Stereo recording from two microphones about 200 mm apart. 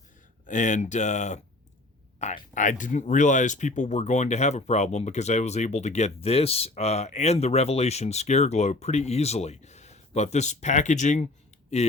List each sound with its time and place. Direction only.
0.4 s speech: 40° left (ahead or behind)